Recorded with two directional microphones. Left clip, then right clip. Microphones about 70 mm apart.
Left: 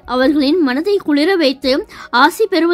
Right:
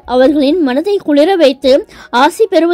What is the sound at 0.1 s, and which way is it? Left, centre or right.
A woman's voice, right.